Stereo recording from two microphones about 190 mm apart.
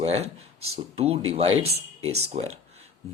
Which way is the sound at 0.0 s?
35° right (ahead or behind).